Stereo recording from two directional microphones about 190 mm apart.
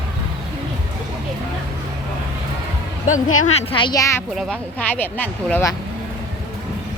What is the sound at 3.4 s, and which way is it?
Speech, 30° left (ahead or behind).